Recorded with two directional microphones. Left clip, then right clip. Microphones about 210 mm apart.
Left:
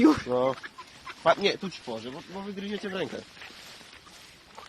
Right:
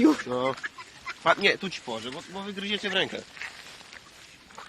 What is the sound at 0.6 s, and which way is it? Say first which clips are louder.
Speech: right 7 dB; centre (ahead or behind).